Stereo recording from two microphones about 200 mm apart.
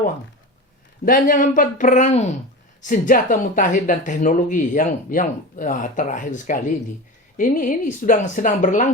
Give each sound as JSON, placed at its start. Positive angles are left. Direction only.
{"t": 1.0, "sound": "speech", "side_deg": 45}